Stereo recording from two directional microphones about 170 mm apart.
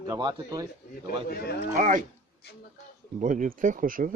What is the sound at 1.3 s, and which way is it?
Speech, 65° left (ahead or behind).